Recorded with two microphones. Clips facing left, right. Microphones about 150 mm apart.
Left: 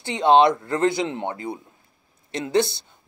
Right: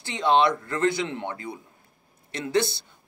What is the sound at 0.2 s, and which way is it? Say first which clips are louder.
Speech: left 5 dB; 20° left (ahead or behind).